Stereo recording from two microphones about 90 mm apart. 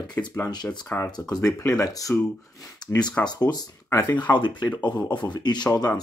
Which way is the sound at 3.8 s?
35° left (ahead or behind).